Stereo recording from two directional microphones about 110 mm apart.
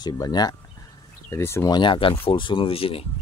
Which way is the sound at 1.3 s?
25° left (ahead or behind).